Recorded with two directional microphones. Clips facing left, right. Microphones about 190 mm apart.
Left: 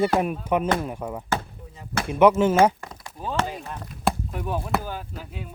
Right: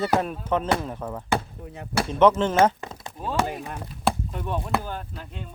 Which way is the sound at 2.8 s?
25° right (ahead or behind).